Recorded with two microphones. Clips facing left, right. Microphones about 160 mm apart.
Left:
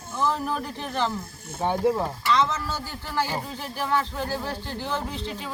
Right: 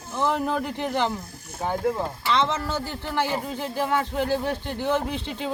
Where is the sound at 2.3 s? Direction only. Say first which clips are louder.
Right 1 dB; 25° right (ahead or behind).